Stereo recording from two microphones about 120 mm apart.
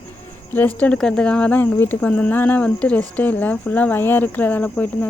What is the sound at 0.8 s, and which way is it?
Speech, 10° left (ahead or behind).